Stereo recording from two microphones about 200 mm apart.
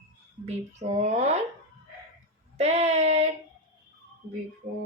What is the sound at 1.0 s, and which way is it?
Speech, 35° right (ahead or behind).